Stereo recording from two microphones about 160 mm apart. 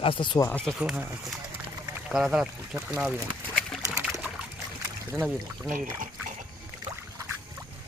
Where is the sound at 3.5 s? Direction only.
Centre (ahead or behind).